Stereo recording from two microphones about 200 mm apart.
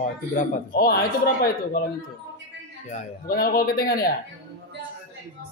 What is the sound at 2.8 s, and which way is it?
Speech, 45° left (ahead or behind).